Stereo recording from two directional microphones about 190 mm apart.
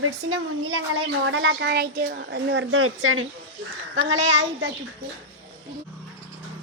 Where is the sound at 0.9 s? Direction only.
85° right.